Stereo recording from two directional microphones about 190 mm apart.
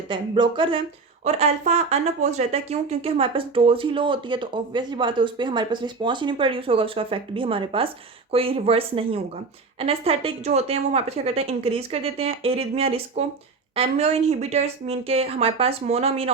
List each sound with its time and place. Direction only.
0.1 s a woman's voice: 25° right (ahead or behind)